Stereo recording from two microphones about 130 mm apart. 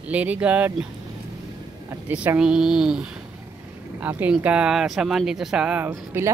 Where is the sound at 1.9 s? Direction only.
10° right (ahead or behind).